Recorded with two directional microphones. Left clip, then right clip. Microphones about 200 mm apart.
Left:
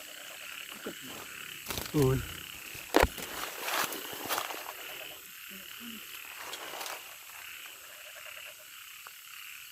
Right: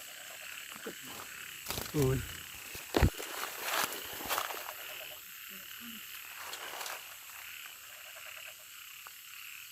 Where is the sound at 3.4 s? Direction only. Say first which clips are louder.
Left 2 dB; 35° right (ahead or behind).